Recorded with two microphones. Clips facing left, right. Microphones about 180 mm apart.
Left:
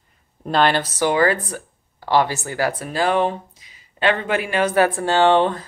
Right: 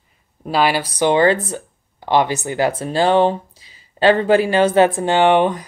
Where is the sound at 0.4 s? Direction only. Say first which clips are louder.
Right 1 dB; 5° right (ahead or behind).